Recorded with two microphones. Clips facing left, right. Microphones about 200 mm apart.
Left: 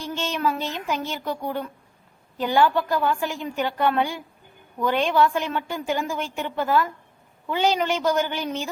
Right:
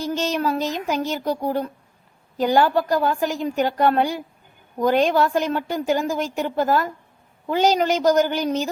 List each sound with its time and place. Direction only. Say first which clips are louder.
0.0 s a woman's voice: right 3 dB; 40° right (ahead or behind)